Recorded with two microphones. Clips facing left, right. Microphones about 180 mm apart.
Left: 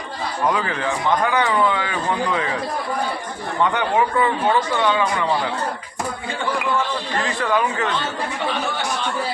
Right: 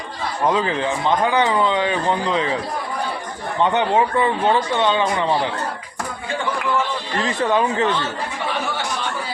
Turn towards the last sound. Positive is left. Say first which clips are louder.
# right 2 dB
turn(degrees=-25)  # may be behind; listen again after turning